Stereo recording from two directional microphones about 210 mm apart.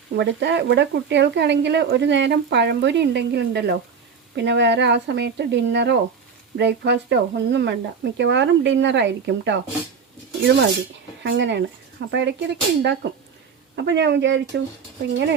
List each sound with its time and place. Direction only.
0.2 s speech: 55° right (ahead or behind)
11.2 s speech: 55° right (ahead or behind)